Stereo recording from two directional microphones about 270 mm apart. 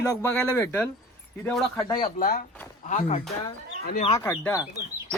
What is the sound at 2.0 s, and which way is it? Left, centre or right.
Speech, left.